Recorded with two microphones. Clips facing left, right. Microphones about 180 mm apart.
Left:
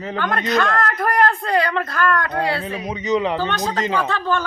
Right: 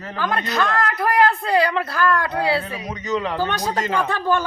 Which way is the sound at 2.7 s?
15° left (ahead or behind).